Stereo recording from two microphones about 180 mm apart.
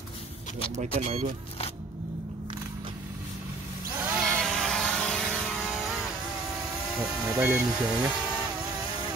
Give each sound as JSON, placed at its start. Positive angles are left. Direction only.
{"t": 0.7, "sound": "speech", "side_deg": -35}
{"t": 4.0, "sound": "vehicle", "side_deg": -5}
{"t": 7.0, "sound": "speech", "side_deg": -5}